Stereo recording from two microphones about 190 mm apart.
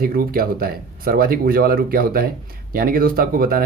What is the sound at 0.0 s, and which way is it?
Speech, 50° right (ahead or behind).